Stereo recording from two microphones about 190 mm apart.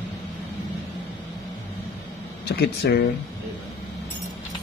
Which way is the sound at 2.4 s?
60° left (ahead or behind).